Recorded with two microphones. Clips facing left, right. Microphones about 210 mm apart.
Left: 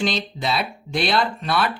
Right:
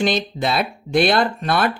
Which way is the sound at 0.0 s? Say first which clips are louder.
Right 4 dB; 50° right (ahead or behind).